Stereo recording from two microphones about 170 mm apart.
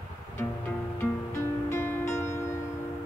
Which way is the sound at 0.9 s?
10° left (ahead or behind).